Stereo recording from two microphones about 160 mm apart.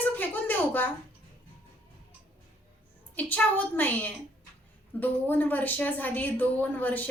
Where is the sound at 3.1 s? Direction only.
10° left (ahead or behind).